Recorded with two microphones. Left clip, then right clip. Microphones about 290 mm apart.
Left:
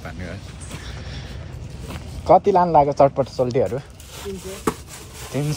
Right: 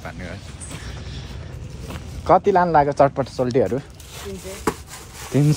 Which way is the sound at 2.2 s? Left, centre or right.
Right.